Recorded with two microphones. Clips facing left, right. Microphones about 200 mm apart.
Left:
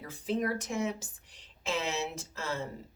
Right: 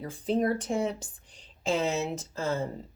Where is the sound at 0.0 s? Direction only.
35° right (ahead or behind).